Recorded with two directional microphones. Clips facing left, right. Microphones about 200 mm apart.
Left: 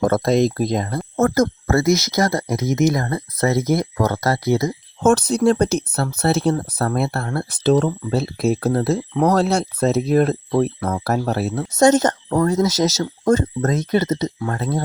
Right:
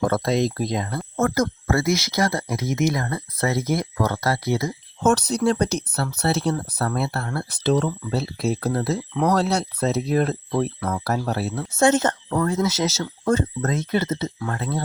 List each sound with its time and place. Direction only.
0.0 s speech: 45° left (ahead or behind)